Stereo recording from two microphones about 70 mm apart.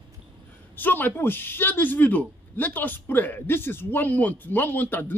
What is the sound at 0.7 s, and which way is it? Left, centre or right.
A man's voice, left.